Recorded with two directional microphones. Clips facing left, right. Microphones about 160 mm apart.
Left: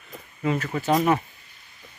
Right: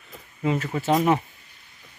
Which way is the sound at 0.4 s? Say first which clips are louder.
Right 1 dB; 20° right (ahead or behind).